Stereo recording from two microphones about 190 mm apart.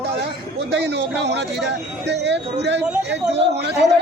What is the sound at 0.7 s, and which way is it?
Speech, 65° right (ahead or behind).